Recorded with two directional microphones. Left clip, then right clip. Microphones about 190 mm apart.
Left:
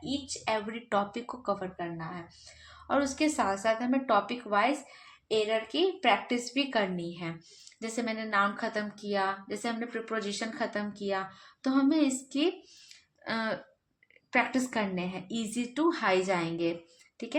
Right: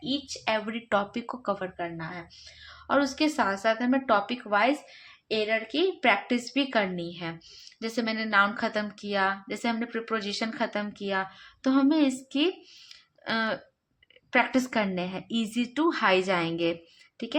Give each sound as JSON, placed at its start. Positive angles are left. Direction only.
{"t": 0.0, "sound": "a woman's voice", "side_deg": -40}